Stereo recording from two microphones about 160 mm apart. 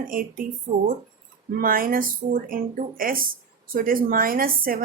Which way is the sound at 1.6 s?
60° right (ahead or behind).